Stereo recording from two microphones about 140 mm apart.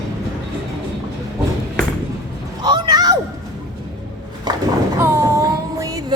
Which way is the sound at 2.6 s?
30° right (ahead or behind).